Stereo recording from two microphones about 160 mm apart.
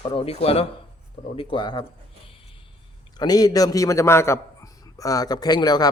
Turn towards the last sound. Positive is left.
turn(degrees=25)  # may be behind; listen again after turning